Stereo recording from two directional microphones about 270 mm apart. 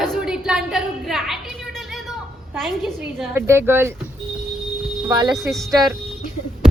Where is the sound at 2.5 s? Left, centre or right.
Centre.